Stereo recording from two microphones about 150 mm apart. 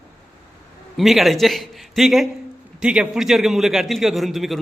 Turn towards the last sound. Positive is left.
turn(degrees=0)  # may be behind; listen again after turning